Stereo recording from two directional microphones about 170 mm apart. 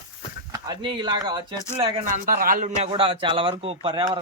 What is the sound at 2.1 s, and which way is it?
Speech, 55° right (ahead or behind).